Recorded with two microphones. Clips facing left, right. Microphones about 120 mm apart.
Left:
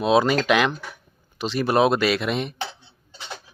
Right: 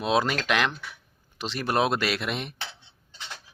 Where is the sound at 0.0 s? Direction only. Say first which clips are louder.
Left 6 dB; centre (ahead or behind).